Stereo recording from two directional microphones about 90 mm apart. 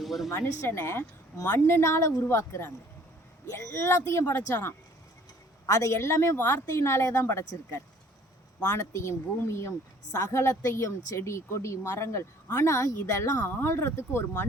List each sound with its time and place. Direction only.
0.0 s a sound: centre (ahead or behind)
0.3 s a woman's voice: 35° left (ahead or behind)
5.6 s a woman's voice: 40° left (ahead or behind)